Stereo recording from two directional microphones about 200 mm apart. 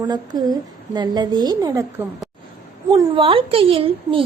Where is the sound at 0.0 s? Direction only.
20° right (ahead or behind).